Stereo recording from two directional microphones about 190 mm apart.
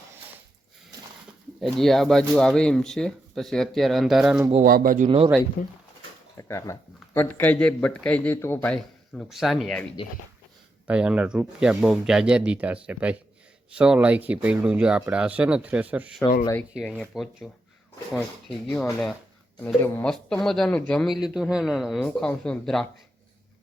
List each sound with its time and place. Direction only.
1.6 s speech: centre (ahead or behind)
4.6 s speech: 50° right (ahead or behind)
5.0 s speech: 30° right (ahead or behind)
5.6 s speech: 50° left (ahead or behind)
6.3 s speech: 15° left (ahead or behind)
10.8 s speech: 5° right (ahead or behind)